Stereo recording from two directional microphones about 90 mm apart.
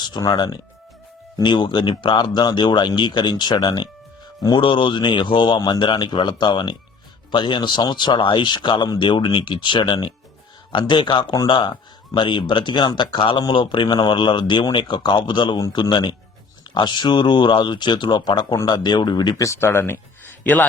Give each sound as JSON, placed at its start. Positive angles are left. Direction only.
{"t": 0.0, "sound": "speech", "side_deg": 50}
{"t": 19.4, "sound": "speech", "side_deg": 30}